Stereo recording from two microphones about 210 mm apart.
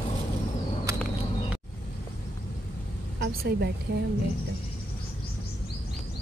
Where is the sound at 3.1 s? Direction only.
50° right (ahead or behind).